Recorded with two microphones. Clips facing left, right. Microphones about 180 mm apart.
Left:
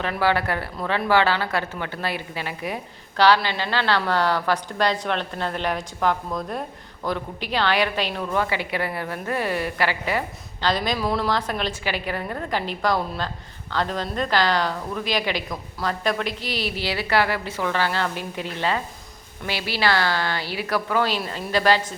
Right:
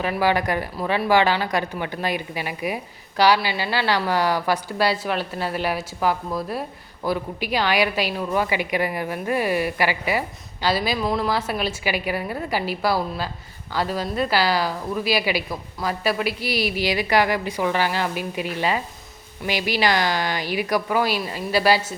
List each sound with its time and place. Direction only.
0.0 s speech: 10° right (ahead or behind)